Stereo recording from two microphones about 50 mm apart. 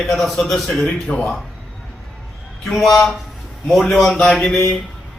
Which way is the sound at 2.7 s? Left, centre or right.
Centre.